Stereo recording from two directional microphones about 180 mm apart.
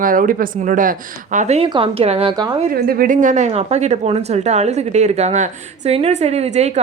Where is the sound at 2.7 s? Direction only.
55° right (ahead or behind).